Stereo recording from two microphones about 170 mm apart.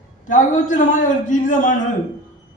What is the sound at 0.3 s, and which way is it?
A man's voice, 50° left (ahead or behind).